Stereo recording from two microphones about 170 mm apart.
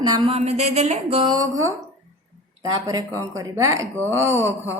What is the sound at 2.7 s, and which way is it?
A woman's voice, 20° right (ahead or behind).